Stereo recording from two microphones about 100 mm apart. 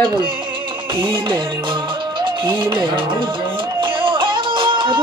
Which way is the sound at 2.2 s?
55° right (ahead or behind).